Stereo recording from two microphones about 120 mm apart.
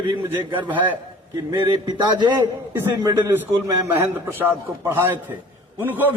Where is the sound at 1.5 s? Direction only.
35° right (ahead or behind).